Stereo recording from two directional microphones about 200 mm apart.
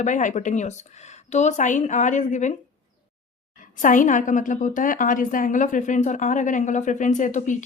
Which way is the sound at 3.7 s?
40° left (ahead or behind).